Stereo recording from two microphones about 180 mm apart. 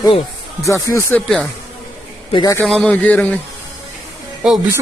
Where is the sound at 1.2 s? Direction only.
Centre (ahead or behind).